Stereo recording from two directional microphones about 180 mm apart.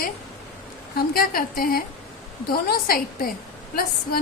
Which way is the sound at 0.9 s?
55° left (ahead or behind).